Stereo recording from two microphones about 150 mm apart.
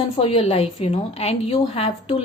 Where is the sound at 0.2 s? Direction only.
40° left (ahead or behind).